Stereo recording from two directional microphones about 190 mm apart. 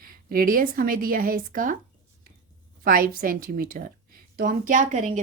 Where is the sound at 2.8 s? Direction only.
50° right (ahead or behind).